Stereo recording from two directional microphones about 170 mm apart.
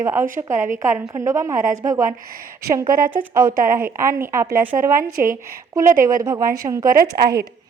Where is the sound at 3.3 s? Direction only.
55° right (ahead or behind).